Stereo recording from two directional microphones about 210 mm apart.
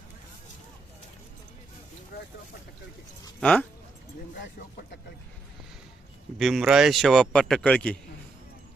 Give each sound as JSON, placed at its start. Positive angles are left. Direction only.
{"t": 2.1, "sound": "vehicle", "side_deg": 50}
{"t": 3.4, "sound": "speech", "side_deg": 5}
{"t": 6.4, "sound": "speech", "side_deg": 0}